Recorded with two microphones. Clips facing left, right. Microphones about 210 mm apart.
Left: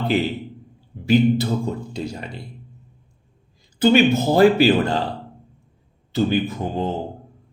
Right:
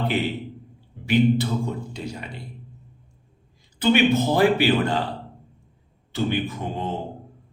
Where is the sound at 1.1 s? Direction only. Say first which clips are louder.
Left 3 dB; 40° left (ahead or behind).